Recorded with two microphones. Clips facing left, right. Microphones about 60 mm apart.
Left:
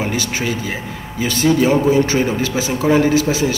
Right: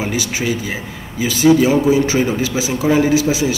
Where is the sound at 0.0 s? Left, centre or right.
Centre.